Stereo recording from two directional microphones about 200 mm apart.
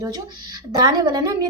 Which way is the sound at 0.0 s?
20° right (ahead or behind).